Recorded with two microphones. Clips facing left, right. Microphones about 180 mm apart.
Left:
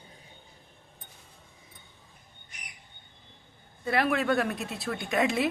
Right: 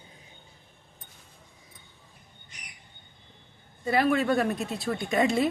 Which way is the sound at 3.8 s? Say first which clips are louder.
Right 2 dB; centre (ahead or behind).